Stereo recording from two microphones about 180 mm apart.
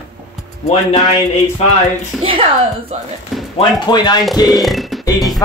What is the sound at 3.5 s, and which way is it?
Speech, 25° left (ahead or behind).